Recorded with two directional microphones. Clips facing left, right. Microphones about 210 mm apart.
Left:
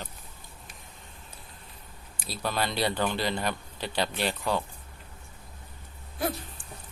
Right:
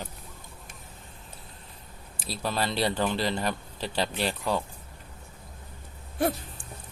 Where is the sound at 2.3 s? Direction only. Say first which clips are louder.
Right 1 dB; centre (ahead or behind).